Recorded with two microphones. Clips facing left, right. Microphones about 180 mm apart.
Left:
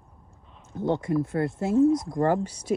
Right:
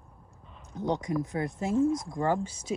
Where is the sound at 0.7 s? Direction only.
15° right (ahead or behind).